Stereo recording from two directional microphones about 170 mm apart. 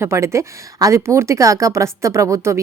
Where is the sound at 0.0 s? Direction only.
15° right (ahead or behind).